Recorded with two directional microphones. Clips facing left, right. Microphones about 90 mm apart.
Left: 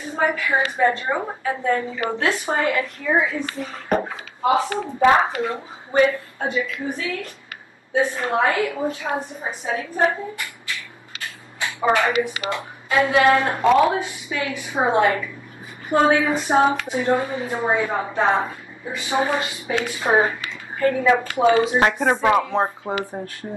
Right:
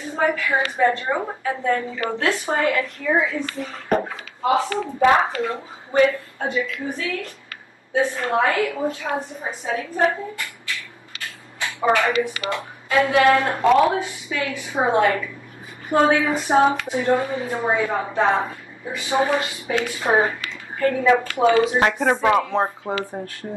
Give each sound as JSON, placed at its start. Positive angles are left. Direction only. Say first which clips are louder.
{"t": 0.1, "sound": "speech", "louder": "even", "side_deg": 20}
{"t": 11.6, "sound": "speech", "louder": "even", "side_deg": 20}
{"t": 21.5, "sound": "speech", "louder": "even", "side_deg": 30}
{"t": 21.7, "sound": "speech", "louder": "even", "side_deg": 20}